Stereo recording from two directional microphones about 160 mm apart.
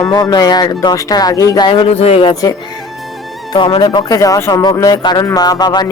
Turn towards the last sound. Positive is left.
turn(degrees=25)  # may be behind; listen again after turning